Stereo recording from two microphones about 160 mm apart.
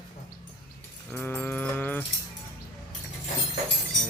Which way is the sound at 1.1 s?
10° left (ahead or behind).